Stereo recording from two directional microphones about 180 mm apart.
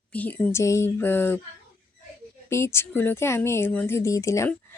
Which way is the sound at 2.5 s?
15° left (ahead or behind).